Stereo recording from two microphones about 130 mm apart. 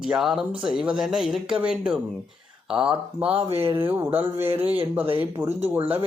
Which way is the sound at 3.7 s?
15° right (ahead or behind).